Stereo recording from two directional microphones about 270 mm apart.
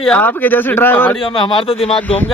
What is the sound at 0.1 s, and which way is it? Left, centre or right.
A man's voice, centre.